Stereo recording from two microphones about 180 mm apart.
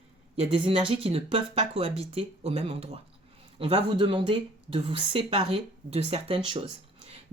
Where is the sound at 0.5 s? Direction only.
30° right (ahead or behind).